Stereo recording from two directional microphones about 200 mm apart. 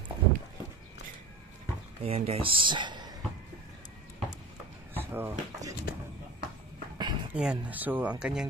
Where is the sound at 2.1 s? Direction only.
30° right (ahead or behind).